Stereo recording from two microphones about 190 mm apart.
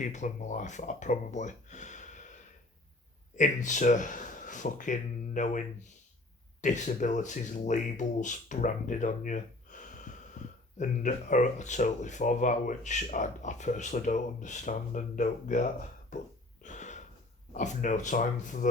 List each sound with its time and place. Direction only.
0.0 s speech: 40° left (ahead or behind)
16.6 s a sound: 40° left (ahead or behind)
17.5 s speech: 40° left (ahead or behind)